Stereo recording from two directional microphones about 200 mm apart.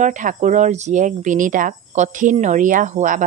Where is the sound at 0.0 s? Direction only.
40° right (ahead or behind).